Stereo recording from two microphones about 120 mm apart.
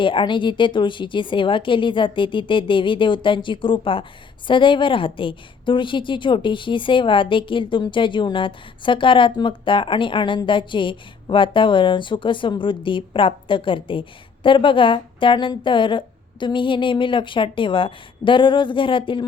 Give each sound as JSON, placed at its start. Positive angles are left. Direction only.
{"t": 0.0, "sound": "a woman's voice", "side_deg": 45}